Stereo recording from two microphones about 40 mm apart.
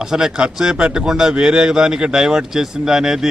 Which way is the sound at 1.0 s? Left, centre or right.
Centre.